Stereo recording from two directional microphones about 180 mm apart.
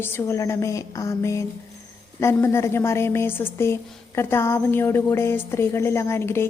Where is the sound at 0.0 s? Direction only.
15° left (ahead or behind).